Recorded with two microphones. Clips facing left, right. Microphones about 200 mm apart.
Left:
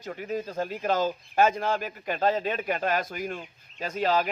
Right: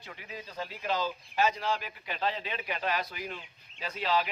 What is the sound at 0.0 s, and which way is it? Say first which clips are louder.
Speech: left 12 dB; 45° left (ahead or behind).